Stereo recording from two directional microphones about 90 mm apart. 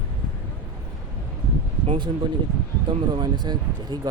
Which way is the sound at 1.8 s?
75° right (ahead or behind).